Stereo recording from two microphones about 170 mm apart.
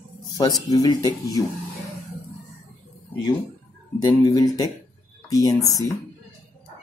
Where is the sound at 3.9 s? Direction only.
25° left (ahead or behind).